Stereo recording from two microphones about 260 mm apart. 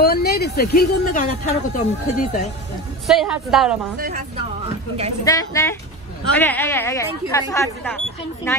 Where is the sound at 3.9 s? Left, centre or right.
Right.